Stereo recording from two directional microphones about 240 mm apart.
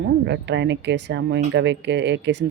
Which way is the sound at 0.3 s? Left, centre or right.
Right.